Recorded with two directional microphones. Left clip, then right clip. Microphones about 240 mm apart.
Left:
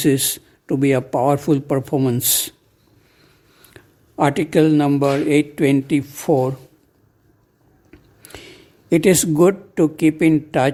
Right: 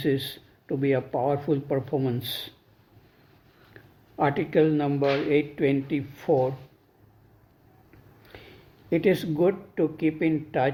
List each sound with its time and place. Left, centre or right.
0.0 s speech: left
3.8 s speech: left
7.9 s a sound: left